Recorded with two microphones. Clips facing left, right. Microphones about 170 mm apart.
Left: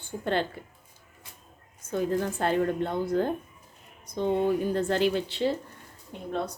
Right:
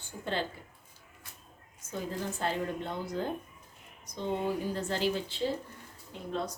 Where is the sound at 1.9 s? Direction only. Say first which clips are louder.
Left 9 dB; 55° left (ahead or behind).